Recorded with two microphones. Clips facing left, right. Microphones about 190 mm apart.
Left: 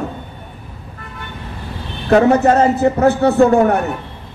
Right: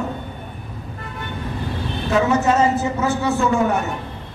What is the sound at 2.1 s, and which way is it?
A man's voice, 60° left (ahead or behind).